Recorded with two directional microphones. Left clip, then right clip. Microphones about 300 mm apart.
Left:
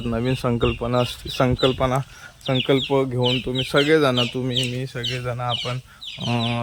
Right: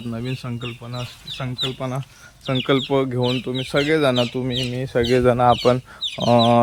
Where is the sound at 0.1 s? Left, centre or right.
Centre.